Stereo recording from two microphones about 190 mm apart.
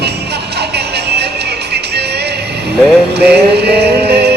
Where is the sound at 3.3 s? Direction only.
60° right (ahead or behind).